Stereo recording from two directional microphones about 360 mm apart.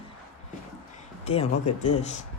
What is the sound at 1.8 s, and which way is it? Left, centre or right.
Speech, centre.